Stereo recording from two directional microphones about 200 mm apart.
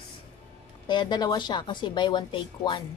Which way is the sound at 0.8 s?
20° left (ahead or behind).